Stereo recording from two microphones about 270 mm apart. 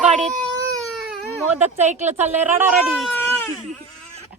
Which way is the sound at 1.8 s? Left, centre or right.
Right.